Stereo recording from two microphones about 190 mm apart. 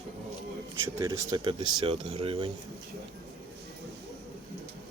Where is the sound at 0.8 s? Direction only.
15° right (ahead or behind).